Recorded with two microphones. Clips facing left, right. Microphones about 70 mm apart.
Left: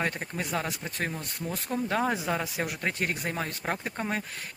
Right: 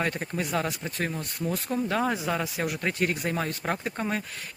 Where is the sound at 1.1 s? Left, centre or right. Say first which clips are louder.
Right 4 dB; centre.